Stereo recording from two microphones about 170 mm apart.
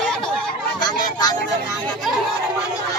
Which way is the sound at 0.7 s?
25° left (ahead or behind).